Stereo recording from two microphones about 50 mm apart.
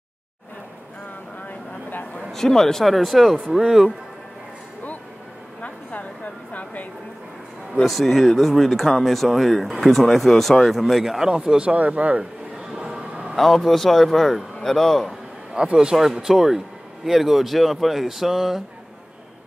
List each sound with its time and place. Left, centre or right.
2.3 s speech: centre
5.6 s a sound: left
7.8 s speech: centre
13.1 s vehicle: right
13.4 s speech: centre
15.5 s a man's voice: centre
16.2 s speech: centre